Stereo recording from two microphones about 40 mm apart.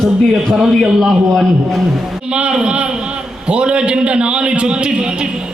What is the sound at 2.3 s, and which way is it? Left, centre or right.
A man's voice, right.